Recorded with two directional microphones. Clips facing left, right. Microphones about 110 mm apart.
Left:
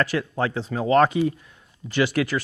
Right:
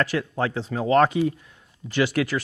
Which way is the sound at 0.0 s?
15° left (ahead or behind).